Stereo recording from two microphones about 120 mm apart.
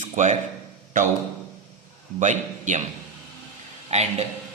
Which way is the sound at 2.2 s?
90° right.